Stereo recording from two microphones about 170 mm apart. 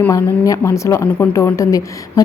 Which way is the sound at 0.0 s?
20° left (ahead or behind).